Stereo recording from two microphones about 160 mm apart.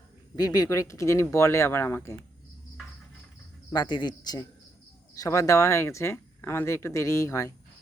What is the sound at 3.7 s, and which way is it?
Speech, 25° left (ahead or behind).